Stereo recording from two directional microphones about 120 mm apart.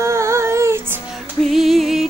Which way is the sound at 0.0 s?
25° right (ahead or behind).